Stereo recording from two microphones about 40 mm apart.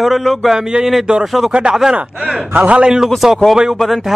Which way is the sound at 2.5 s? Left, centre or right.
Right.